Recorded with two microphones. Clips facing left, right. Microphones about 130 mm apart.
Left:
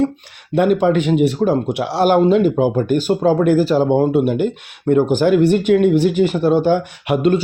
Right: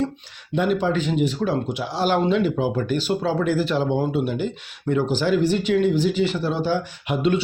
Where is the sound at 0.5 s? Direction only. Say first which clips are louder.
Left 7 dB; 55° left (ahead or behind).